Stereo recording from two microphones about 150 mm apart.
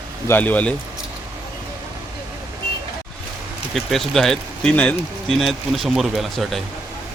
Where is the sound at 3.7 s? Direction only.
Centre (ahead or behind).